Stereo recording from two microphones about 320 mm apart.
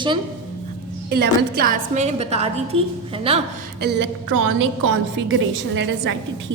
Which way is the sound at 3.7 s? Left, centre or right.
Right.